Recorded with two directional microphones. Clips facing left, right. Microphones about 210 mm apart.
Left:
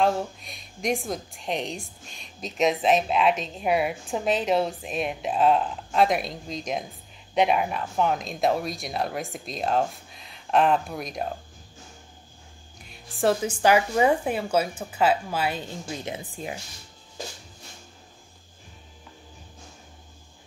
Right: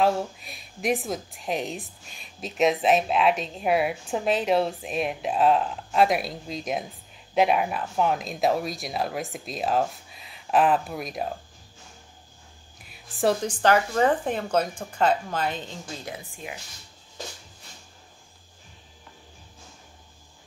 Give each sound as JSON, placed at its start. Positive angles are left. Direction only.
{"t": 0.0, "sound": "a woman's voice", "side_deg": -5}
{"t": 12.8, "sound": "speech", "side_deg": 0}
{"t": 16.1, "sound": "speech", "side_deg": 35}